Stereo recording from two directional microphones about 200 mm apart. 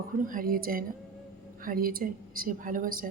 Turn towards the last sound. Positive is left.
turn(degrees=-45)  # may be behind; listen again after turning